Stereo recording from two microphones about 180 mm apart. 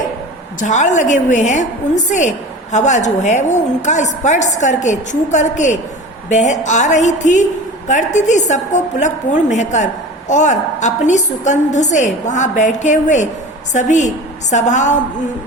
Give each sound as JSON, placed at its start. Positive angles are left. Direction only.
{"t": 0.6, "sound": "a woman's voice", "side_deg": 40}